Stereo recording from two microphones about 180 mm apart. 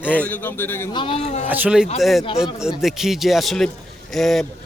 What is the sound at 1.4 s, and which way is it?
A man's voice, 5° right (ahead or behind).